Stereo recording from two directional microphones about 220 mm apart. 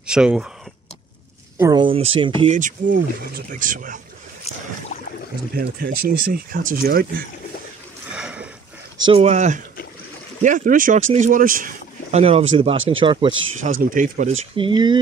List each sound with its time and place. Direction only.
0.0 s speech: 5° right (ahead or behind)
1.6 s speech: 20° right (ahead or behind); by 4.0 s 35° right (ahead or behind)
5.5 s speech: 45° right (ahead or behind)
8.1 s a sound: 5° right (ahead or behind)
9.1 s speech: 30° right (ahead or behind)
12.7 s speech: 60° right (ahead or behind)
13.0 s speech: 20° right (ahead or behind)
13.6 s speech: 35° right (ahead or behind)
14.7 s speech: 20° right (ahead or behind)